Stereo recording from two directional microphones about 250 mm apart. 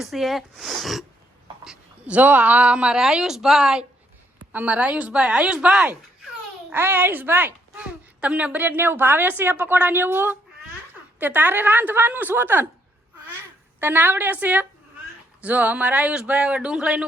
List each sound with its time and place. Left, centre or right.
0.0 s a woman's voice: centre
13.7 s a woman's voice: centre